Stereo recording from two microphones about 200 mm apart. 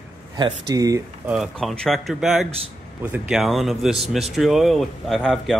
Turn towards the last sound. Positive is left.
turn(degrees=0)  # may be behind; listen again after turning